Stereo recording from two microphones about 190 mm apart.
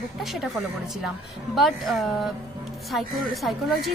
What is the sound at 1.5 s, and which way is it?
A woman's voice, centre (ahead or behind).